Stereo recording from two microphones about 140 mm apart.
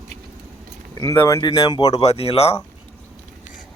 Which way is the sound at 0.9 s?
25° left (ahead or behind).